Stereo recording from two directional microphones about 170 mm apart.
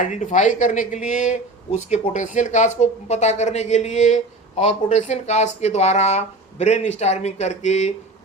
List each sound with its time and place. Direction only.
0.0 s speech: 45° left (ahead or behind)